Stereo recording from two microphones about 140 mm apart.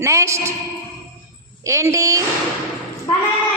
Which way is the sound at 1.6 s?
20° right (ahead or behind).